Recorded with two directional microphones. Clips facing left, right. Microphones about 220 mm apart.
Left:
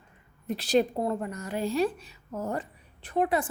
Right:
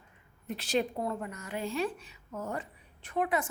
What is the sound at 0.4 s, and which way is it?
A woman's voice, 35° left (ahead or behind).